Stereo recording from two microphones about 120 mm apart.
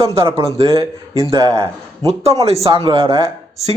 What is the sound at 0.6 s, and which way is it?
Speech, 30° right (ahead or behind).